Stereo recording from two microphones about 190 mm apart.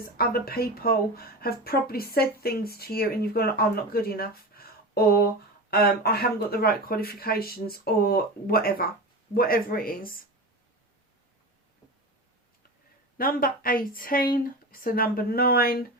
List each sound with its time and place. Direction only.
0.0 s speech: 55° left (ahead or behind)
13.1 s speech: 50° left (ahead or behind)